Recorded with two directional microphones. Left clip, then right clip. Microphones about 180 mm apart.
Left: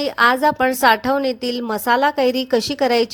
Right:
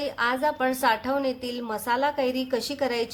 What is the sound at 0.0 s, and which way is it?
A woman's voice, 50° left (ahead or behind).